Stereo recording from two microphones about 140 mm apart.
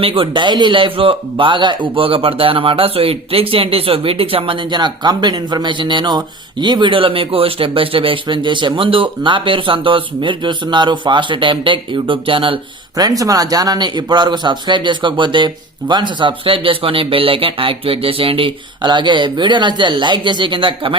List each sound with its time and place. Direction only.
0.0 s speech: 40° right (ahead or behind)
13.0 s speech: 25° right (ahead or behind)